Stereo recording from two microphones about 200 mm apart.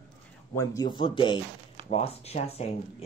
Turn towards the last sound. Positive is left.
turn(degrees=30)  # may be behind; listen again after turning